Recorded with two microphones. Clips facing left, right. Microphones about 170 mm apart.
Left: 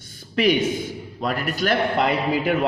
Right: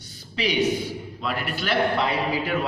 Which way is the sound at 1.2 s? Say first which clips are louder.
Left 5 dB; 45° left (ahead or behind).